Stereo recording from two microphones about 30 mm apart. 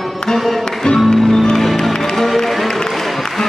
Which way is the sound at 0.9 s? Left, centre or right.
Left.